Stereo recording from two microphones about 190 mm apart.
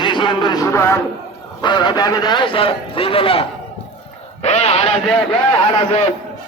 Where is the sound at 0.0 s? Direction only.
25° left (ahead or behind).